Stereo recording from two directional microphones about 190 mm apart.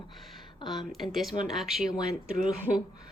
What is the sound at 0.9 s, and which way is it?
Speech, centre (ahead or behind).